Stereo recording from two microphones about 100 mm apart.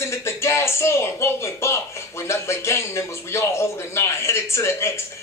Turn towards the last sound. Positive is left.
turn(degrees=25)  # may be behind; listen again after turning